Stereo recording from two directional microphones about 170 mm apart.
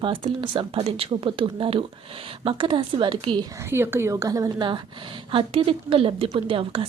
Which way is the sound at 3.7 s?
15° right (ahead or behind).